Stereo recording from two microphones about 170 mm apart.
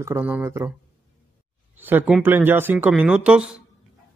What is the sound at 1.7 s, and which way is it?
Speech, 10° right (ahead or behind).